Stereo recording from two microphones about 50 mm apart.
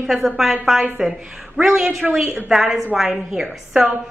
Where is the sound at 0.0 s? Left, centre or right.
Centre.